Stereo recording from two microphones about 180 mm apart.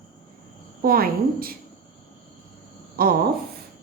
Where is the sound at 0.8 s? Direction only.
55° right (ahead or behind).